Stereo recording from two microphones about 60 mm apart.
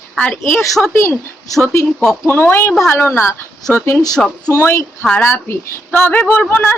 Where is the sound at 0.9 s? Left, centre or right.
Left.